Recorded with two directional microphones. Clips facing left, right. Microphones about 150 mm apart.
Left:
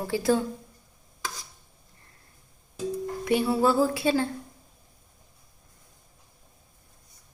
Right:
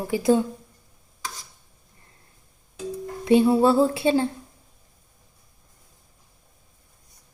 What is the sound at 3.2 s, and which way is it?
A woman's voice, 25° right (ahead or behind).